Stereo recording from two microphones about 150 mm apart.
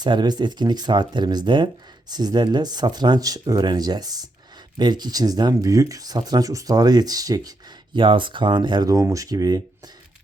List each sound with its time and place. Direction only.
0.0 s speech: 30° right (ahead or behind)